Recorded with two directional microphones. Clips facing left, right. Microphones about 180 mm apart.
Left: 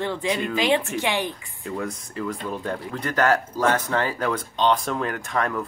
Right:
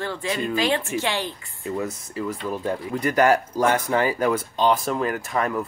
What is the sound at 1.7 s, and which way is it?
Speech, 5° right (ahead or behind).